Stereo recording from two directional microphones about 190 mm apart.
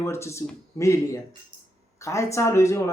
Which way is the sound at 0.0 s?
15° left (ahead or behind).